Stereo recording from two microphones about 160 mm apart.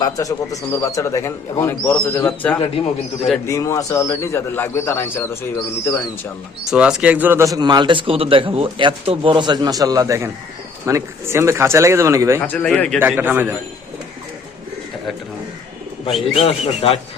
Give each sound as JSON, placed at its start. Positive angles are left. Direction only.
{"t": 0.0, "sound": "speech", "side_deg": 20}
{"t": 2.6, "sound": "speech", "side_deg": 35}
{"t": 3.4, "sound": "speech", "side_deg": 20}
{"t": 6.7, "sound": "a man's voice", "side_deg": -5}
{"t": 12.5, "sound": "speech", "side_deg": 10}
{"t": 13.0, "sound": "speech", "side_deg": -10}
{"t": 16.3, "sound": "speech", "side_deg": 40}